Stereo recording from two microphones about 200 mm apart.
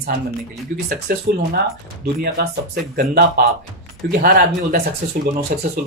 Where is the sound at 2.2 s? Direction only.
50° right (ahead or behind).